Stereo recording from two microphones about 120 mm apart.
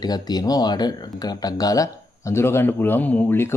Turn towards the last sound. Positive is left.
turn(degrees=15)  # may be behind; listen again after turning